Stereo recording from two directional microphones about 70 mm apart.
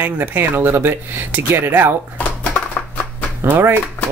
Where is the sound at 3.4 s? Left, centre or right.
Right.